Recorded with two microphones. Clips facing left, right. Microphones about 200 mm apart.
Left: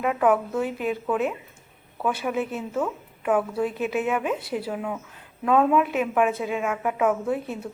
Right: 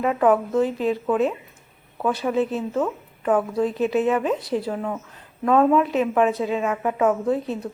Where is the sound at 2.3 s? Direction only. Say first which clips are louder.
Right 5 dB; 35° right (ahead or behind).